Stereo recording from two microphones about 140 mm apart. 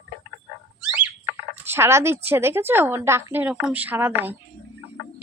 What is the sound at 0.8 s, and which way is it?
Speech, 15° right (ahead or behind).